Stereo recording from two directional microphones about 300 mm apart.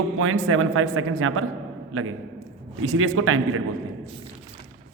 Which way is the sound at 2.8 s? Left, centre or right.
Right.